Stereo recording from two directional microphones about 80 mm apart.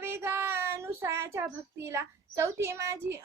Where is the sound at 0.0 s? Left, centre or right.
Right.